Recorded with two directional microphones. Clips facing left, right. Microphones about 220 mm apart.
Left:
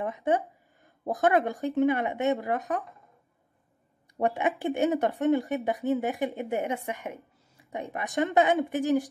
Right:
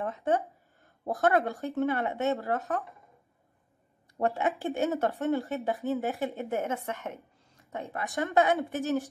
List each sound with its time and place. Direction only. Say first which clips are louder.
0.0 s a woman's voice: left 2 dB; 15° left (ahead or behind)
4.2 s a woman's voice: left 2 dB; 15° left (ahead or behind)